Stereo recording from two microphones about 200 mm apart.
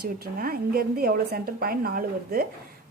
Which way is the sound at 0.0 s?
50° right (ahead or behind).